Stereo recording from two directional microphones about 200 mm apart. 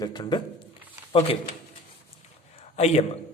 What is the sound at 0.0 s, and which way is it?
Speech, 20° left (ahead or behind).